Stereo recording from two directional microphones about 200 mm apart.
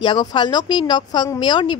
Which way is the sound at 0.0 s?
20° left (ahead or behind).